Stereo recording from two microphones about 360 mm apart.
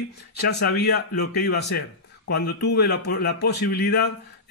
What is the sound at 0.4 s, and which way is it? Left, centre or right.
Speech, left.